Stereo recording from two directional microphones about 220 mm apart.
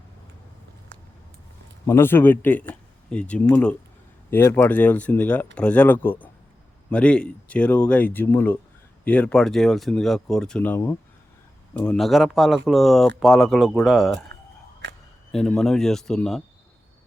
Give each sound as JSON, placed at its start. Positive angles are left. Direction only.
{"t": 1.9, "sound": "speech", "side_deg": 10}
{"t": 14.8, "sound": "a sound", "side_deg": -55}
{"t": 15.3, "sound": "speech", "side_deg": 0}